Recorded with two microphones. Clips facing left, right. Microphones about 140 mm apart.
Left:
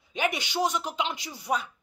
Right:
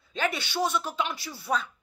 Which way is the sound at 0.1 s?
15° left (ahead or behind).